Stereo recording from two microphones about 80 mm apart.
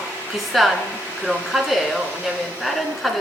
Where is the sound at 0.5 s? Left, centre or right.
Centre.